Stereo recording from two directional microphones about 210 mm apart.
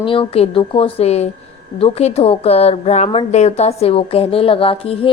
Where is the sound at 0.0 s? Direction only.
25° left (ahead or behind).